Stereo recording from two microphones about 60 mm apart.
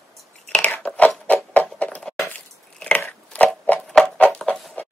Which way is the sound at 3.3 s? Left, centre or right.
Left.